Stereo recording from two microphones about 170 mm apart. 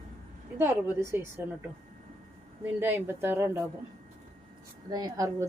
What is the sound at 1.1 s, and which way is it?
Speech, 15° right (ahead or behind).